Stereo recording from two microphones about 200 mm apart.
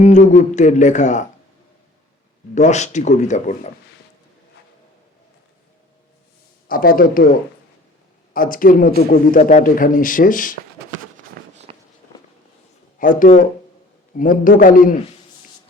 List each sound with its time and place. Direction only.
0.0 s speech: 35° left (ahead or behind)
2.6 s speech: 35° left (ahead or behind)
6.7 s a man's voice: 45° left (ahead or behind)
8.3 s a man's voice: 45° left (ahead or behind)
11.5 s a sound: 30° right (ahead or behind)
13.0 s a man's voice: 40° left (ahead or behind)